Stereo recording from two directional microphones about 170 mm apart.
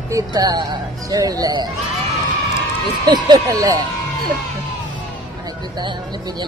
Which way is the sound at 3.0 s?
25° right (ahead or behind).